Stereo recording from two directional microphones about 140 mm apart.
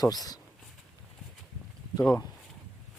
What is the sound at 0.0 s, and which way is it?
Speech, 25° left (ahead or behind).